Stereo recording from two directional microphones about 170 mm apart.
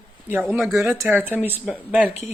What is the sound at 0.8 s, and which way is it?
Speech, 15° right (ahead or behind).